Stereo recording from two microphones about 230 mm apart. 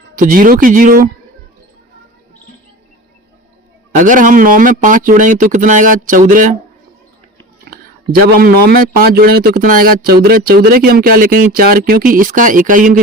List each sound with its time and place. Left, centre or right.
0.2 s speech: right
3.9 s speech: right
8.1 s speech: right